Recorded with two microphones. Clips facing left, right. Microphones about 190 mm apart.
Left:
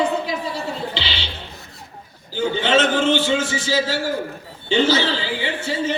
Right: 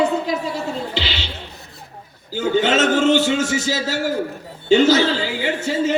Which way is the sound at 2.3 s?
45° right (ahead or behind).